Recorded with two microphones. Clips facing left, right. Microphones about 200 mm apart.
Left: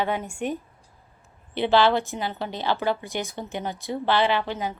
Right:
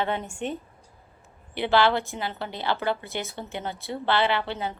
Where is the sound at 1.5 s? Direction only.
20° left (ahead or behind).